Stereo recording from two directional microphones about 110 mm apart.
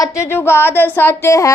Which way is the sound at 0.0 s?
25° left (ahead or behind).